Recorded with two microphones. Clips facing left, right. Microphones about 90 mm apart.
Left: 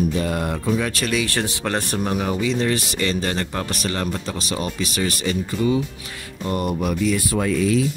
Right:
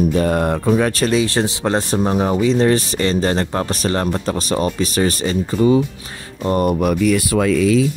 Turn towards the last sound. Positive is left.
turn(degrees=-90)